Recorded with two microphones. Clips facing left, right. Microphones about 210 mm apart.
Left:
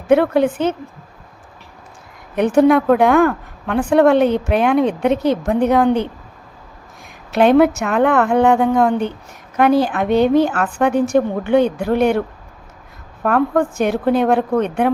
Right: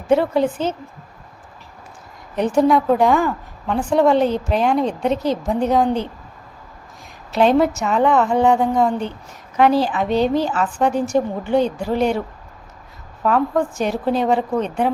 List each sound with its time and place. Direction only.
0.1 s a woman's voice: 60° left (ahead or behind)
2.3 s a woman's voice: 60° left (ahead or behind)
7.3 s a woman's voice: 60° left (ahead or behind)
13.2 s a woman's voice: 60° left (ahead or behind)